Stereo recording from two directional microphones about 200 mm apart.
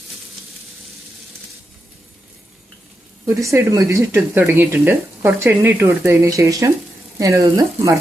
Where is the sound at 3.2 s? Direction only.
15° right (ahead or behind).